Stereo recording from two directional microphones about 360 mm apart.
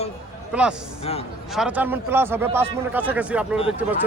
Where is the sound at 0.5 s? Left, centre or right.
Centre.